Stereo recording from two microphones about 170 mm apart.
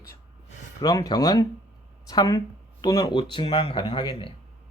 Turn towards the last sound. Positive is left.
turn(degrees=30)  # may be behind; listen again after turning